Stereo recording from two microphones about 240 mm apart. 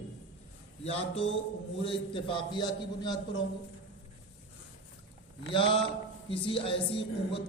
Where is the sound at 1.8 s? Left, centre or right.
Left.